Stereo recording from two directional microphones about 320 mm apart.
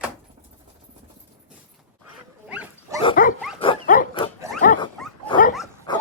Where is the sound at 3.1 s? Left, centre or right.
Left.